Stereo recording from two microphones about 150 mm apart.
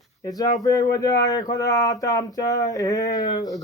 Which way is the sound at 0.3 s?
25° left (ahead or behind).